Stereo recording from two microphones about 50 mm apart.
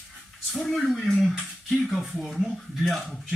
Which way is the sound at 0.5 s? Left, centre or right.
Centre.